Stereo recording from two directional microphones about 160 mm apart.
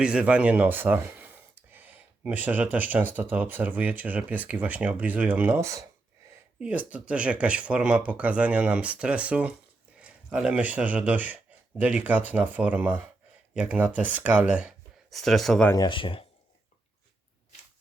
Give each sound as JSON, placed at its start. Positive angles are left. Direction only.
{"t": 0.0, "sound": "speech", "side_deg": -5}
{"t": 15.7, "sound": "speech", "side_deg": 30}